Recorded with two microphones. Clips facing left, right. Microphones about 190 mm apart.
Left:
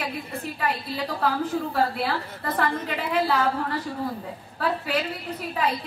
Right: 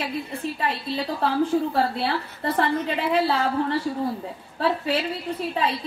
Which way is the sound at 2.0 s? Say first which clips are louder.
Right 1 dB; 30° right (ahead or behind).